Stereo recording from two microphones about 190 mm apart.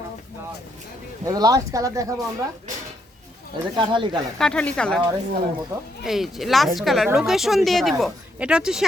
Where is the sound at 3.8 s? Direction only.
25° right (ahead or behind).